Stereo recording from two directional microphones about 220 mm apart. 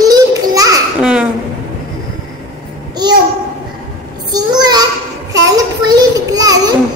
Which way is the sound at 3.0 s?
20° right (ahead or behind).